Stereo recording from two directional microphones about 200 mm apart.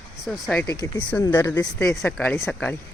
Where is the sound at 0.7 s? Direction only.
20° left (ahead or behind).